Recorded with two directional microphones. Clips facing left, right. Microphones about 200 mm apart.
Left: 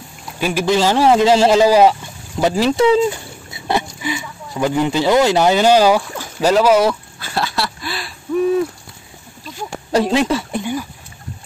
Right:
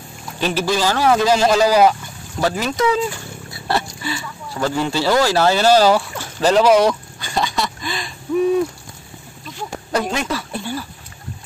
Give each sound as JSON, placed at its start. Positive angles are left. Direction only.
{"t": 0.4, "sound": "a man's voice", "side_deg": 10}
{"t": 0.7, "sound": "speech", "side_deg": 25}
{"t": 9.9, "sound": "speech", "side_deg": 30}
{"t": 10.5, "sound": "a sound", "side_deg": 15}